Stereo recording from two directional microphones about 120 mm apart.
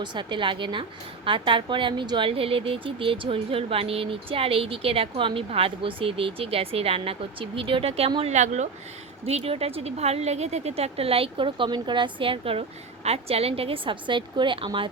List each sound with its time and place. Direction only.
0.0 s a woman's voice: 40° right (ahead or behind); by 8.1 s 55° right (ahead or behind)
8.2 s a woman's voice: 75° right (ahead or behind)
9.2 s a woman's voice: 55° right (ahead or behind)